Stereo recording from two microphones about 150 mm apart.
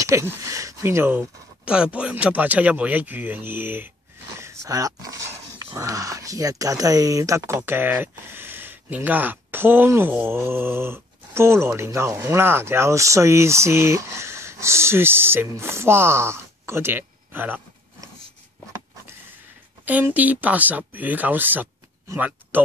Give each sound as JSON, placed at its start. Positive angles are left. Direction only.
{"t": 0.0, "sound": "speech", "side_deg": -20}
{"t": 19.8, "sound": "speech", "side_deg": -10}